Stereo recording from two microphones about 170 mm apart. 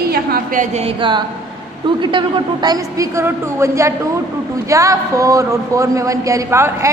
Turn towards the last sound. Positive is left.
turn(degrees=-15)  # may be behind; listen again after turning